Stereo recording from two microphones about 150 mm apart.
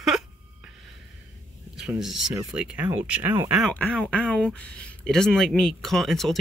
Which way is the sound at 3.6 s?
10° left (ahead or behind).